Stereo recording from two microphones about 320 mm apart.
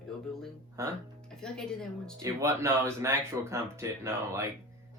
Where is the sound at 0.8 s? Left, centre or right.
Centre.